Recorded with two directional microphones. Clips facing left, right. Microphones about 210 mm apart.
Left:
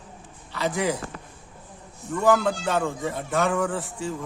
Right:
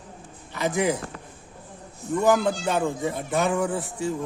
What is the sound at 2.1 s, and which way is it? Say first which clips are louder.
A man's voice: even; 15° right (ahead or behind).